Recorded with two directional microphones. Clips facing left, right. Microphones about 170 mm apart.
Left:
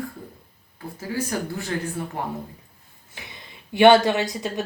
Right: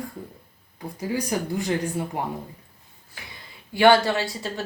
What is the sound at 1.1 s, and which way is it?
Speech, 15° right (ahead or behind).